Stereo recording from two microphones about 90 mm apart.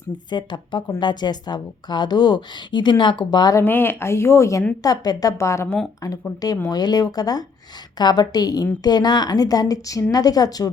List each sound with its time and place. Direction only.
0.3 s a woman's voice: 55° left (ahead or behind)
3.6 s speech: 25° left (ahead or behind)
4.8 s a woman's voice: 45° left (ahead or behind)
6.0 s a woman's voice: 45° left (ahead or behind)